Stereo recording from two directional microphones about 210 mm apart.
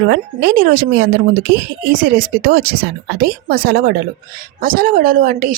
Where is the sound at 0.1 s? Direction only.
45° right (ahead or behind).